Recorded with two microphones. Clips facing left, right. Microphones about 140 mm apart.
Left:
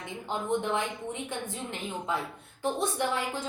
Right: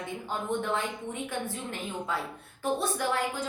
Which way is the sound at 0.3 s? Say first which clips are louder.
Left 2 dB; 20° left (ahead or behind).